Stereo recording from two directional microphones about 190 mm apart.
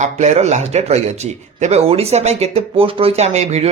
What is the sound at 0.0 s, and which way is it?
Speech, 35° right (ahead or behind).